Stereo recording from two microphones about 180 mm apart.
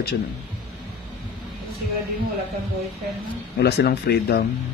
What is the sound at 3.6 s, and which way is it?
Speech, 65° left (ahead or behind).